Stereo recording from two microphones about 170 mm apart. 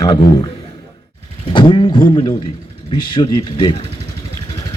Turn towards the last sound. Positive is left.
turn(degrees=25)  # may be behind; listen again after turning